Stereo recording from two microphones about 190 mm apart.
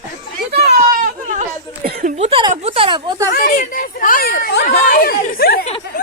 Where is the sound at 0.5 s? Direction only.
50° right (ahead or behind).